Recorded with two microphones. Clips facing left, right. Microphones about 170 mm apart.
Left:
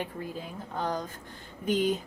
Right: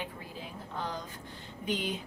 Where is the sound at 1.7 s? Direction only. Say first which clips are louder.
Left 7 dB; 45° left (ahead or behind).